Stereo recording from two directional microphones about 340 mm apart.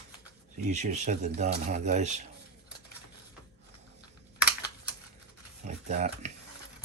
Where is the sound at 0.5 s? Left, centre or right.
Right.